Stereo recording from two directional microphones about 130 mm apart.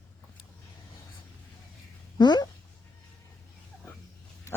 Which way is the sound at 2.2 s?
35° left (ahead or behind).